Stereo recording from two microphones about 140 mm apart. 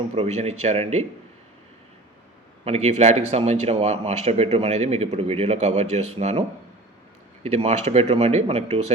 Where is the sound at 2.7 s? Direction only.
50° right (ahead or behind).